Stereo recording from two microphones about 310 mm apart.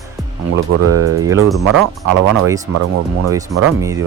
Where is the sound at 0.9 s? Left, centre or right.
Right.